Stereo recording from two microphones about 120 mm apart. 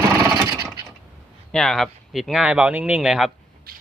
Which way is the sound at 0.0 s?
30° right (ahead or behind).